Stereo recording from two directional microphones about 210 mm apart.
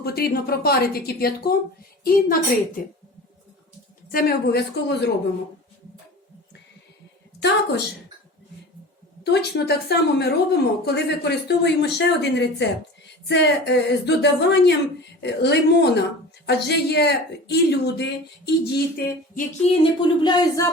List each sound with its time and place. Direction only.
0.0 s speech: 45° left (ahead or behind)
4.1 s speech: 45° left (ahead or behind)
7.3 s a woman's voice: 55° left (ahead or behind)
9.2 s speech: 50° left (ahead or behind)
19.3 s a sound: 40° left (ahead or behind)
19.8 s speech: 20° left (ahead or behind)